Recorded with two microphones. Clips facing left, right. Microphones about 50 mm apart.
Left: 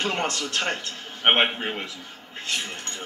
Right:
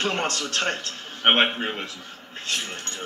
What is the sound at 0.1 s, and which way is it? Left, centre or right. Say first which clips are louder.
Speech: even; right.